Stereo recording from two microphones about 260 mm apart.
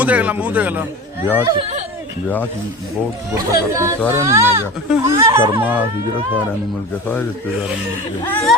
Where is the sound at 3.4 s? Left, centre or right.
Centre.